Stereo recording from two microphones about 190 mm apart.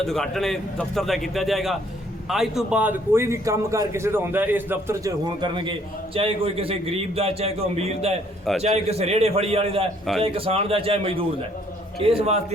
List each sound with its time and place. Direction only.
0.0 s a man's voice: centre (ahead or behind); by 12.5 s 35° right (ahead or behind)